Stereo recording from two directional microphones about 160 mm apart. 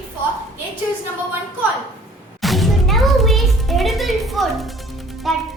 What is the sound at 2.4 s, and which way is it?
Music, centre (ahead or behind).